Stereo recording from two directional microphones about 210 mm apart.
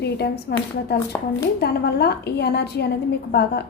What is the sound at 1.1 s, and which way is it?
Speech, 10° left (ahead or behind).